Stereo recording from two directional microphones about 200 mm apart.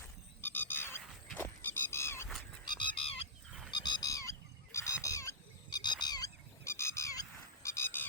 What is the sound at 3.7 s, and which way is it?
Goose, 20° left (ahead or behind).